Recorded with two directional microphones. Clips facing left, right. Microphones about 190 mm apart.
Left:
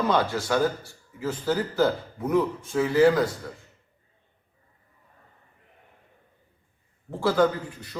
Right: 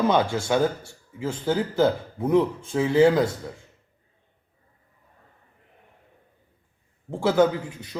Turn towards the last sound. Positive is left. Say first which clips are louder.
# right 2 dB
turn(degrees=-20)  # may be behind; listen again after turning